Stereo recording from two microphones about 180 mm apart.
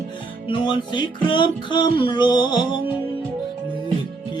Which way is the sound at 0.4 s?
25° left (ahead or behind).